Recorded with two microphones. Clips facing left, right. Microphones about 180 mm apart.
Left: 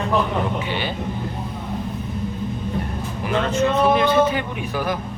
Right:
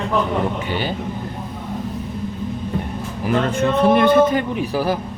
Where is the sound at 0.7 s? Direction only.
40° right (ahead or behind).